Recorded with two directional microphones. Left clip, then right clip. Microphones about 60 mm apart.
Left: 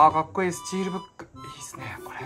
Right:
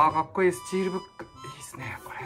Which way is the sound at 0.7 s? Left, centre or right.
Left.